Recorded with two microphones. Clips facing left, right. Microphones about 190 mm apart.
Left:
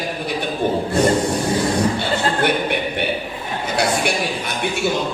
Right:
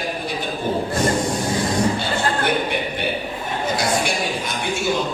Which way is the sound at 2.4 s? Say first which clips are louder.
Left 2 dB; 60° left (ahead or behind).